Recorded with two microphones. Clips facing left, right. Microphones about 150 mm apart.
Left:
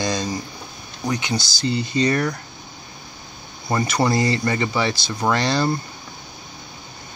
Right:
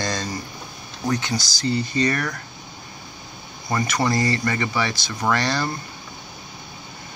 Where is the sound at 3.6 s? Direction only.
30° left (ahead or behind).